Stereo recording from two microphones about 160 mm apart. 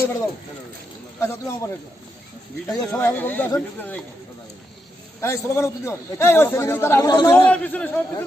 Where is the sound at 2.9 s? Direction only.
15° left (ahead or behind).